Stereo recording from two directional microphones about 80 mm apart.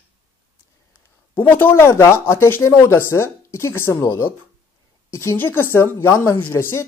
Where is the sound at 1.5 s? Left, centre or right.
Left.